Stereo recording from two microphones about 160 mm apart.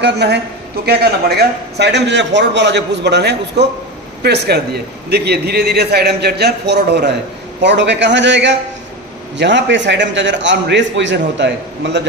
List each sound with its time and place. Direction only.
0.0 s a man's voice: 90° right